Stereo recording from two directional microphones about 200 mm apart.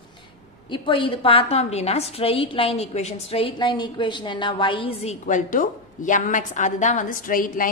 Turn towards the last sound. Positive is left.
turn(degrees=45)  # may be behind; listen again after turning